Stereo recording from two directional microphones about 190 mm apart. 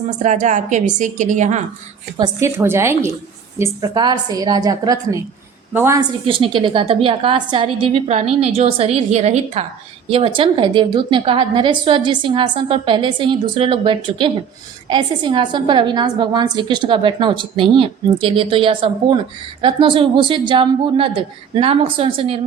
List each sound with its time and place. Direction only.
0.2 s a woman's voice: 40° right (ahead or behind)
2.1 s a woman's voice: 20° right (ahead or behind)
6.2 s a woman's voice: 25° right (ahead or behind)